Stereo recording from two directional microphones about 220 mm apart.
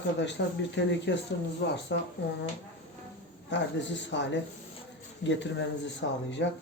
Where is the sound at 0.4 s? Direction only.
55° left (ahead or behind).